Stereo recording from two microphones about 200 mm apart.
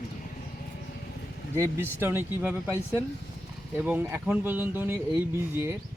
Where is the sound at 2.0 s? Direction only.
10° right (ahead or behind).